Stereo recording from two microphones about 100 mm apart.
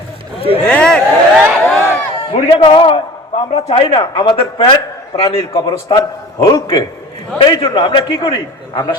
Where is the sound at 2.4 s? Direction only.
60° left (ahead or behind).